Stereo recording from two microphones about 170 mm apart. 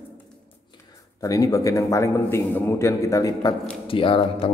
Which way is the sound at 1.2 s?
20° left (ahead or behind).